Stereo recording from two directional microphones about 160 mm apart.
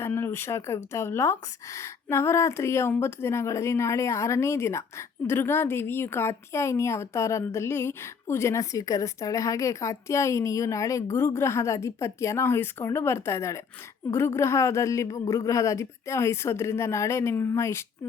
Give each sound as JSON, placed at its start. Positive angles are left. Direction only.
{"t": 0.0, "sound": "speech", "side_deg": 15}